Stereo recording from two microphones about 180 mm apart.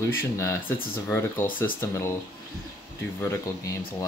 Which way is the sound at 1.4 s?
50° left (ahead or behind).